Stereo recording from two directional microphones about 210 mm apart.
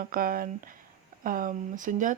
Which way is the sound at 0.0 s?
45° right (ahead or behind).